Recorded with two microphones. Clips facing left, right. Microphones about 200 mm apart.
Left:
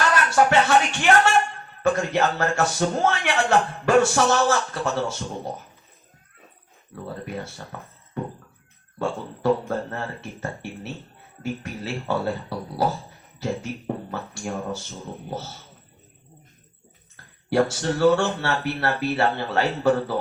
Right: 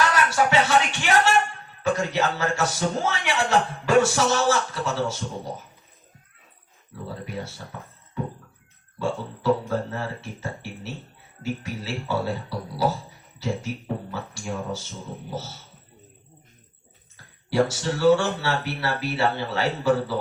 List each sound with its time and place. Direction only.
0.3 s a man's voice: 55° left (ahead or behind)
7.0 s a man's voice: 55° left (ahead or behind)
9.0 s a man's voice: 55° left (ahead or behind)
17.5 s a man's voice: 55° left (ahead or behind)